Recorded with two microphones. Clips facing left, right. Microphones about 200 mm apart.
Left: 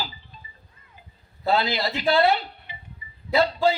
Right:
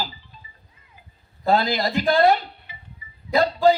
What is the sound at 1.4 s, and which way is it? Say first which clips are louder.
A man's voice: right 3 dB; 45° right (ahead or behind).